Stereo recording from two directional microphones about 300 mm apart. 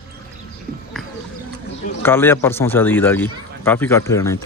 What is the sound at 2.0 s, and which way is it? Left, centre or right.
Speech, centre.